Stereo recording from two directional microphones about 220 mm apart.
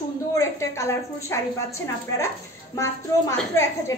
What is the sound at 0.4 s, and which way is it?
A woman's voice, 15° left (ahead or behind).